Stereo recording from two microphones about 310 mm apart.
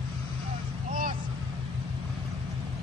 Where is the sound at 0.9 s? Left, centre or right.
Right.